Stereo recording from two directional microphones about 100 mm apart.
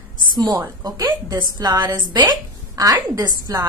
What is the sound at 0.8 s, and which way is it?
A woman's voice, 40° right (ahead or behind).